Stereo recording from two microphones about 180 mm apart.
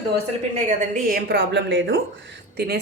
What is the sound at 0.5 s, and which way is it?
Speech, 45° right (ahead or behind).